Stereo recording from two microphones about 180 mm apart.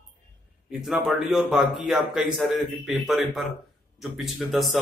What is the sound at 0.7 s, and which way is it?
Speech, centre (ahead or behind).